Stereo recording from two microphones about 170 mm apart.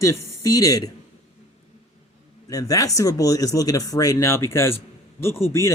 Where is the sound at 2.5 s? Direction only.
20° left (ahead or behind).